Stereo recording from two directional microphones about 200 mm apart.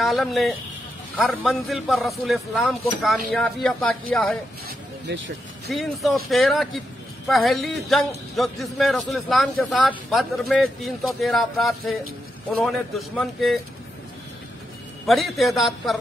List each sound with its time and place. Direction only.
0.0 s a man's voice: centre (ahead or behind)
5.0 s speech: 65° right (ahead or behind)
5.7 s a man's voice: centre (ahead or behind)
15.0 s a man's voice: centre (ahead or behind)